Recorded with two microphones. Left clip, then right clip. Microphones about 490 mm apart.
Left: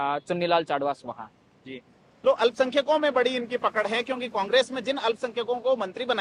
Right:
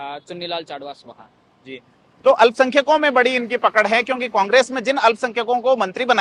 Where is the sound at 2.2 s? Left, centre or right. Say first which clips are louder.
Right 9 dB; right.